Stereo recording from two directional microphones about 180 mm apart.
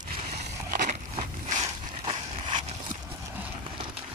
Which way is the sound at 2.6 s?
45° right (ahead or behind).